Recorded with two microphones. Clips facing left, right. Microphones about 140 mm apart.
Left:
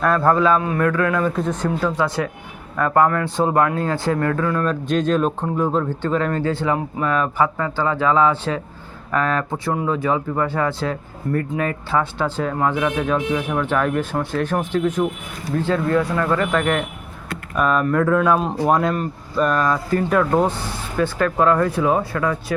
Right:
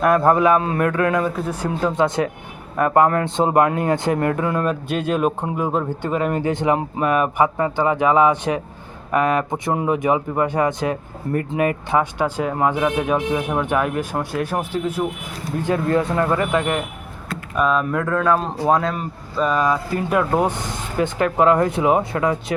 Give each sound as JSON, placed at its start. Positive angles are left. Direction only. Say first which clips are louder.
{"t": 0.0, "sound": "speech", "louder": "right 1 dB", "side_deg": -20}
{"t": 1.4, "sound": "speech", "louder": "left 2 dB", "side_deg": -5}
{"t": 1.8, "sound": "speech", "louder": "right 6 dB", "side_deg": -20}
{"t": 4.7, "sound": "speech", "louder": "left 3 dB", "side_deg": -10}
{"t": 15.6, "sound": "speech", "louder": "right 1 dB", "side_deg": -20}
{"t": 17.6, "sound": "speech", "louder": "left 1 dB", "side_deg": 0}